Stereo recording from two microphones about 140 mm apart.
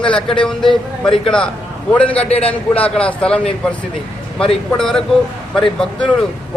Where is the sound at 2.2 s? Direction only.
45° left (ahead or behind).